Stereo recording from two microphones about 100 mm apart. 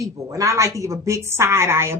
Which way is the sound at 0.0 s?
35° right (ahead or behind).